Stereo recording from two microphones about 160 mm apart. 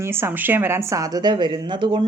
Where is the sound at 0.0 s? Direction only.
15° right (ahead or behind).